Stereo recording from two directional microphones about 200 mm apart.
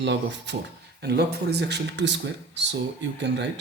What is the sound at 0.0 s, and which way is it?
Speech, 60° right (ahead or behind).